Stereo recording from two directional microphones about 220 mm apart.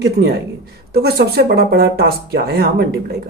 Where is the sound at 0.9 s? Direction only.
45° right (ahead or behind).